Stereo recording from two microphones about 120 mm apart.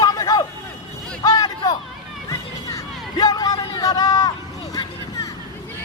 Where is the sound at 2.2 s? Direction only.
30° left (ahead or behind).